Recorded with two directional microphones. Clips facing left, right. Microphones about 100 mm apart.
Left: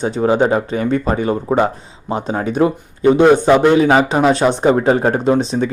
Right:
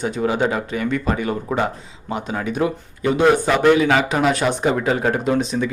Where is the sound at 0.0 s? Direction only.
30° left (ahead or behind).